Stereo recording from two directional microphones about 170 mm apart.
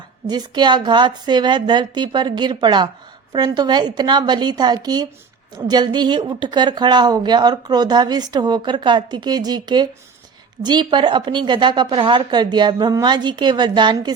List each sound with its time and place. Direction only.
0.3 s speech: 25° right (ahead or behind)